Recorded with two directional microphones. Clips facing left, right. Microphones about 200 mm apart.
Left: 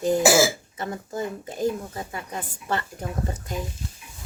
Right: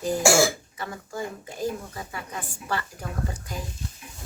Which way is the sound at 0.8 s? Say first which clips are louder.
Left 3 dB; 25° left (ahead or behind).